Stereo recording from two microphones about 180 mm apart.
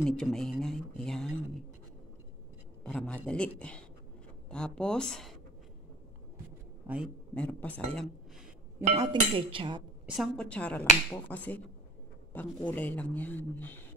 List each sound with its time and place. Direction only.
0.0 s speech: 5° left (ahead or behind)
2.8 s speech: 5° left (ahead or behind)
6.8 s a man's voice: 10° right (ahead or behind)
7.3 s speech: 5° left (ahead or behind)
8.9 s speech: 20° right (ahead or behind)
10.1 s speech: centre (ahead or behind)